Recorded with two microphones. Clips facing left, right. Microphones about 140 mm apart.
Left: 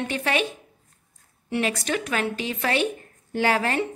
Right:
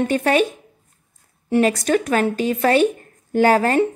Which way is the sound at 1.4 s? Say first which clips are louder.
Right 8 dB; 40° right (ahead or behind).